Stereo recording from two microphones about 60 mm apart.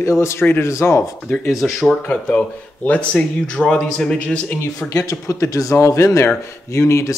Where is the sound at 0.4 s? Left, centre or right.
Left.